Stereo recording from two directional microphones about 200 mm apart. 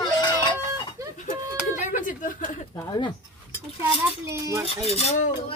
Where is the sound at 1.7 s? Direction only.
40° left (ahead or behind).